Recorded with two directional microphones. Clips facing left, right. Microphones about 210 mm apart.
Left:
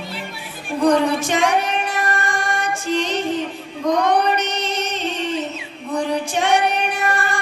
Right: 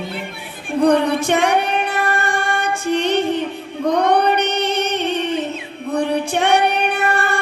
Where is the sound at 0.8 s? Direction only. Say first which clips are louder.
Right 2 dB; 60° right (ahead or behind).